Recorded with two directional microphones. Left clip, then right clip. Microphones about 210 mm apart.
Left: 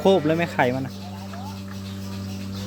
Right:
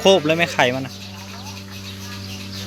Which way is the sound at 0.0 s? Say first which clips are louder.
Right 4 dB; centre (ahead or behind).